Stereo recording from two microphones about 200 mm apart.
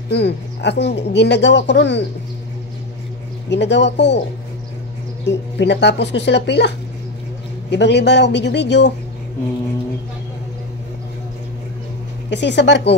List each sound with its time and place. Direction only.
0.1 s speech: 55° left (ahead or behind)
3.4 s speech: 60° left (ahead or behind)
5.2 s speech: 60° left (ahead or behind)
7.7 s speech: 60° left (ahead or behind)
12.3 s speech: 60° left (ahead or behind)